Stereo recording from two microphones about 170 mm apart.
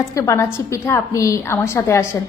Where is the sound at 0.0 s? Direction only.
20° left (ahead or behind).